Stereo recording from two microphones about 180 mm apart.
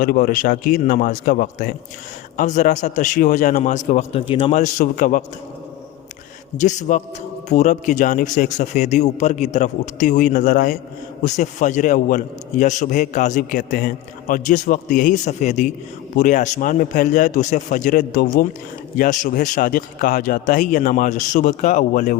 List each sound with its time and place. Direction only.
0.0 s a man's voice: 50° left (ahead or behind); by 4.5 s 30° left (ahead or behind)
4.5 s a man's voice: 45° left (ahead or behind)
6.6 s a man's voice: 40° left (ahead or behind)